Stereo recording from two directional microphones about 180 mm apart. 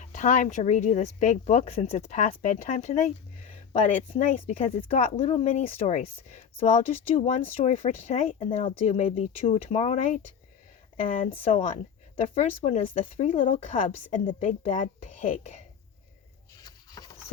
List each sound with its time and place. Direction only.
0.0 s speech: 40° left (ahead or behind)
4.2 s speech: 40° left (ahead or behind)
11.1 s a woman's voice: 45° left (ahead or behind)
16.6 s a sound: 20° left (ahead or behind)